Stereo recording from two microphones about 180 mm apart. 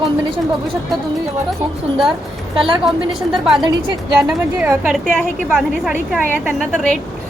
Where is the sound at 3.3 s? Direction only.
Centre (ahead or behind).